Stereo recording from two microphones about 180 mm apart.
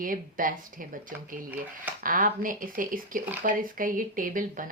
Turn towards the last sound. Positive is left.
turn(degrees=-50)  # may be behind; listen again after turning